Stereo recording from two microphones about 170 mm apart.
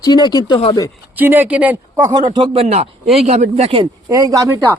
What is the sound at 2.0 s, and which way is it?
Speech, 25° right (ahead or behind).